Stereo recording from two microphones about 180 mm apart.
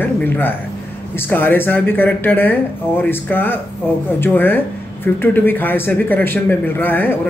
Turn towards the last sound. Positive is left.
turn(degrees=10)  # may be behind; listen again after turning